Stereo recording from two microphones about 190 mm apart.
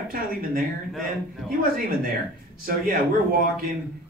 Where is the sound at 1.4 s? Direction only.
5° left (ahead or behind).